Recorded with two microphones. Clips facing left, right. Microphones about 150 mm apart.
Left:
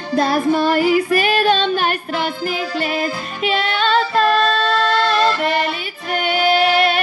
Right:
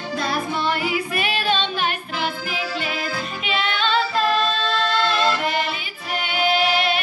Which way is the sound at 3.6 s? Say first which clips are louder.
Left 3 dB; 40° left (ahead or behind).